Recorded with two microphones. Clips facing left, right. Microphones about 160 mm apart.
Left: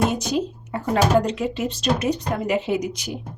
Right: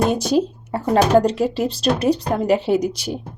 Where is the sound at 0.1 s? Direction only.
35° right (ahead or behind).